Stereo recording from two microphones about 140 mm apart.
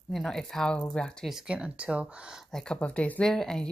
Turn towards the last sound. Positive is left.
turn(degrees=5)  # may be behind; listen again after turning